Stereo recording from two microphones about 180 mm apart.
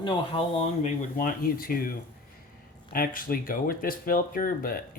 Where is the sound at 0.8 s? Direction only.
50° left (ahead or behind).